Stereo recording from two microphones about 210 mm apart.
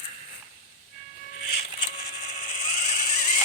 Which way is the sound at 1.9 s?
35° left (ahead or behind).